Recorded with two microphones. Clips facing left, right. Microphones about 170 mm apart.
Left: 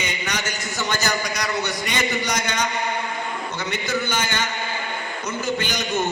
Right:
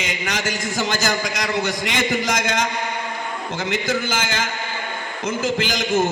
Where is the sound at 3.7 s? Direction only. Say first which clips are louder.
Right 2 dB; 90° right.